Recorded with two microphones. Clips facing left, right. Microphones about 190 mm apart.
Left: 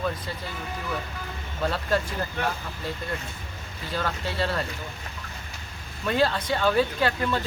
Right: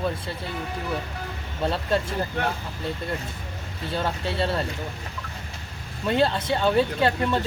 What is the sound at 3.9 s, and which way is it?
Speech, 25° right (ahead or behind).